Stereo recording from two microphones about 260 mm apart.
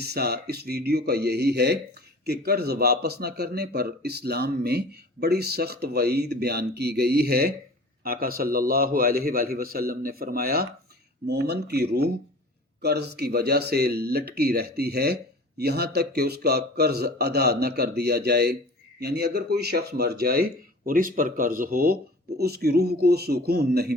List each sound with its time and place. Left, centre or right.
0.0 s speech: right